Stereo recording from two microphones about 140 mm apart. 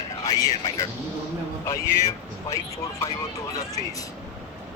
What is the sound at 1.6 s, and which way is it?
Speech, 25° left (ahead or behind).